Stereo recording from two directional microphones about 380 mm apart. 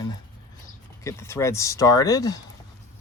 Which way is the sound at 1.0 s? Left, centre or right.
Centre.